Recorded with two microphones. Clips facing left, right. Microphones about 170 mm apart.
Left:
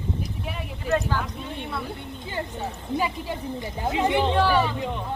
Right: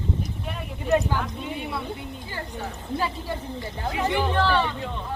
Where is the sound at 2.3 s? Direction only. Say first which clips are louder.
Left 5 dB; 20° left (ahead or behind).